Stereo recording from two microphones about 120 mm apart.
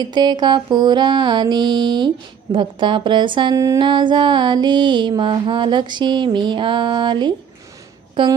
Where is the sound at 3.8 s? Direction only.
40° right (ahead or behind).